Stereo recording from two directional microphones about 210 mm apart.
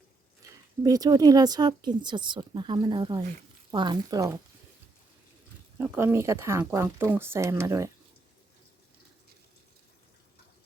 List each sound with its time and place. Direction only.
0.8 s speech: 15° right (ahead or behind)
5.7 s speech: 10° right (ahead or behind)